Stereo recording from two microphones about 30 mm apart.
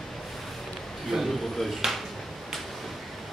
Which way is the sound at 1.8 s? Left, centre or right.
Centre.